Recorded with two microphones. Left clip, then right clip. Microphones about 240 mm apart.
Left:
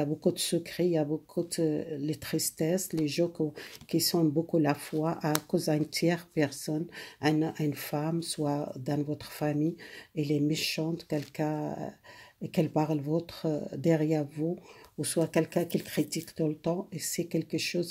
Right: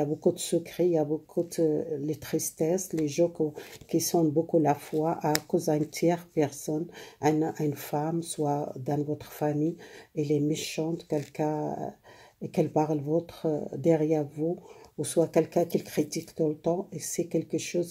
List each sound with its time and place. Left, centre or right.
0.0 s speech: left